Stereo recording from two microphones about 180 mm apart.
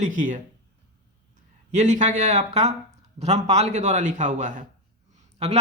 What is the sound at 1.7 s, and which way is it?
Speech, 40° right (ahead or behind).